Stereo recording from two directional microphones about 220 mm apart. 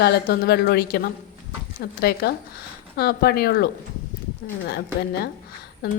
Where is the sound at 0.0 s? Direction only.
45° left (ahead or behind).